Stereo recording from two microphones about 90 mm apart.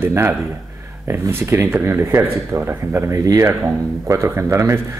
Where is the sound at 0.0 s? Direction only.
30° right (ahead or behind).